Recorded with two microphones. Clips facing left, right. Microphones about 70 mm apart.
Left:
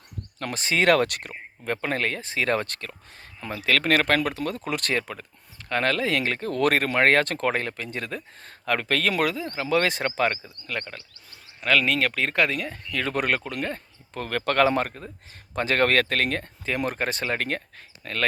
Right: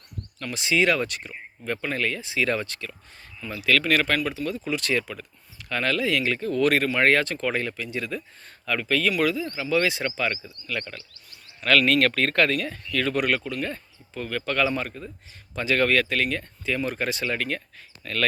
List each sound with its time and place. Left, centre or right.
0.3 s speech: left
1.6 s speech: left
4.2 s speech: left
9.1 s speech: left
11.6 s speech: centre; by 17.6 s left
18.0 s speech: left